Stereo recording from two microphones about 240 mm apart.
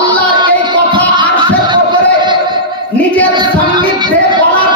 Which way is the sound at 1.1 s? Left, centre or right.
Centre.